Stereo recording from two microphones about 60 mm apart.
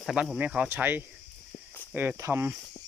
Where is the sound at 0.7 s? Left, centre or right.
Right.